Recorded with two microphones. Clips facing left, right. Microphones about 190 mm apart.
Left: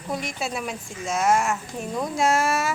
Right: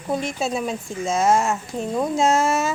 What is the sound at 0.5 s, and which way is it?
A woman's voice, 30° right (ahead or behind).